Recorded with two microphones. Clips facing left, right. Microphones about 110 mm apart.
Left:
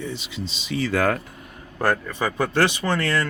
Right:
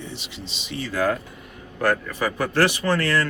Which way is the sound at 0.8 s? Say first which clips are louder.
Left 1 dB; 70° left (ahead or behind).